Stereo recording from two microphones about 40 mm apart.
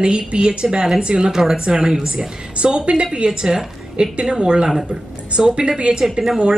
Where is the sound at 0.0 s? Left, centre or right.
Right.